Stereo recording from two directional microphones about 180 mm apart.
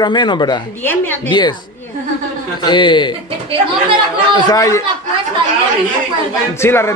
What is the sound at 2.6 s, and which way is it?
Speech, 25° left (ahead or behind).